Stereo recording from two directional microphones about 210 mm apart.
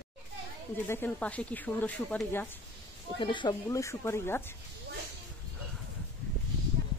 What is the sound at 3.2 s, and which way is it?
Speech, 20° left (ahead or behind).